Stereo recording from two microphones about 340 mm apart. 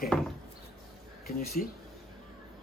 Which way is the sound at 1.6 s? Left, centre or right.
Left.